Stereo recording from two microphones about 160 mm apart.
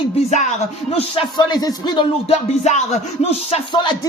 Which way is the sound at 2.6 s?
45° left (ahead or behind).